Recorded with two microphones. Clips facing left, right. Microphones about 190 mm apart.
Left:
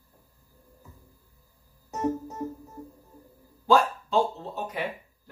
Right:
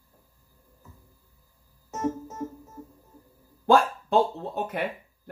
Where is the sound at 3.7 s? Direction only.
55° right (ahead or behind).